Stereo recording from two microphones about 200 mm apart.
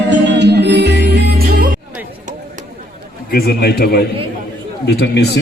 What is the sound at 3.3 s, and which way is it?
A man's voice, 50° left (ahead or behind).